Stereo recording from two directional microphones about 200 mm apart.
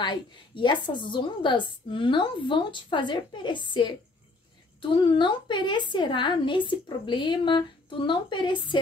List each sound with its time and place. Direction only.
0.0 s a woman's voice: 20° left (ahead or behind)